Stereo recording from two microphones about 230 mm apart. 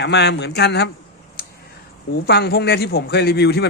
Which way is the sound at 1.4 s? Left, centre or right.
Left.